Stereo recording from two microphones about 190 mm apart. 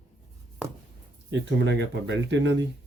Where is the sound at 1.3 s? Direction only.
75° right (ahead or behind).